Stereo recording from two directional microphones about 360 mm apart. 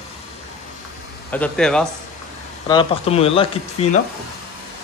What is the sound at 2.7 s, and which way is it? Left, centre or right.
A man's voice, centre.